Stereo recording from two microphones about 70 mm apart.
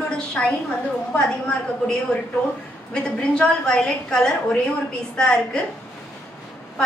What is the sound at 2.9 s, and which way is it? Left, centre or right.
A woman's voice, centre.